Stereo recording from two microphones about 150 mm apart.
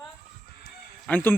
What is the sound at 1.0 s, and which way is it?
Speech, 10° left (ahead or behind).